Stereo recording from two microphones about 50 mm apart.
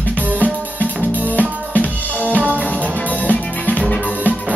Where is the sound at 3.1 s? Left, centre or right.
Left.